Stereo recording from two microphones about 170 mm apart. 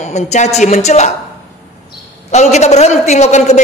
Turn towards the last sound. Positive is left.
turn(degrees=40)  # may be behind; listen again after turning